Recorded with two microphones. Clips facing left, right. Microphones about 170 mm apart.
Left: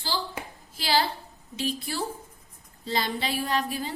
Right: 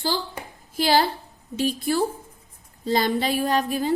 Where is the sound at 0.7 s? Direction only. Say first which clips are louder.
Right 6 dB; 50° right (ahead or behind).